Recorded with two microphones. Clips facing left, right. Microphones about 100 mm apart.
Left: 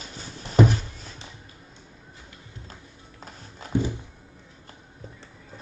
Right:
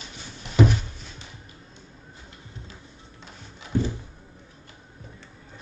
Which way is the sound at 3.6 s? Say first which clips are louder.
Left 2 dB; 45° left (ahead or behind).